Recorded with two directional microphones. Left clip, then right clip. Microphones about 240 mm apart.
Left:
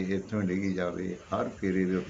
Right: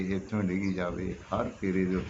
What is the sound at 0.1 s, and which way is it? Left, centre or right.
Speech, centre.